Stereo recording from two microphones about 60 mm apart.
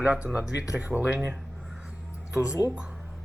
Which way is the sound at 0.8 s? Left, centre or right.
Right.